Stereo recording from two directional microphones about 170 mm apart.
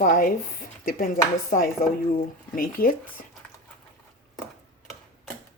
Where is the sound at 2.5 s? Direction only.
55° left (ahead or behind).